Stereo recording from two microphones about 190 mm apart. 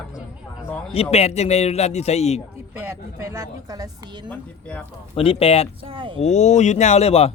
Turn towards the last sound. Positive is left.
turn(degrees=30)  # may be behind; listen again after turning